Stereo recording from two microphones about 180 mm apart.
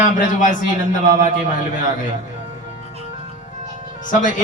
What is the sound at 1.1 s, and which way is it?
Speech, 45° right (ahead or behind).